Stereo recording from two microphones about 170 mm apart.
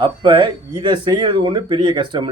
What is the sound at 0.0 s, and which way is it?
Speech, 30° right (ahead or behind).